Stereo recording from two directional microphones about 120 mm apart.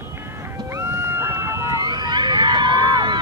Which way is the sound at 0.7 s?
20° right (ahead or behind).